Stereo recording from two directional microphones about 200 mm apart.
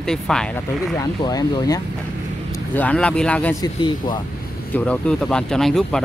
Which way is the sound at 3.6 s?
20° left (ahead or behind).